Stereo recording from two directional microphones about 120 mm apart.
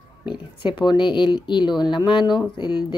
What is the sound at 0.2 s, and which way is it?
Speech, 40° left (ahead or behind).